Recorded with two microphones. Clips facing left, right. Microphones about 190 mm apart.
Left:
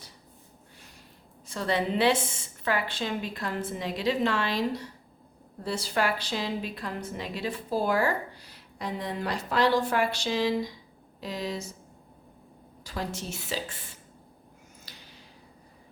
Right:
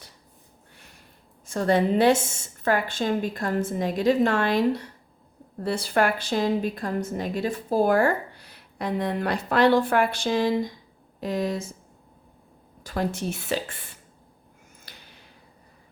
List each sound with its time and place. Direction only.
1.5 s a woman's voice: 45° right (ahead or behind)
12.8 s a woman's voice: 55° right (ahead or behind)
14.9 s a sound: 55° right (ahead or behind)